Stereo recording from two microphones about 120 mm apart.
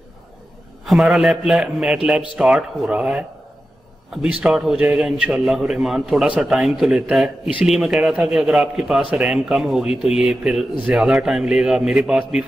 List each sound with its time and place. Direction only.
0.8 s a man's voice: centre (ahead or behind)